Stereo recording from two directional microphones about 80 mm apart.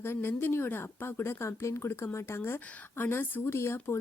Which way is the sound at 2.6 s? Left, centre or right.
Centre.